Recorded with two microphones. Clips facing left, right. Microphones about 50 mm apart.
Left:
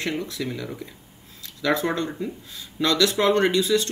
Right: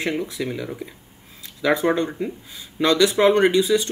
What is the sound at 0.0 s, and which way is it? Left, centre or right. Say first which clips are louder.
Speech: right 3 dB; centre.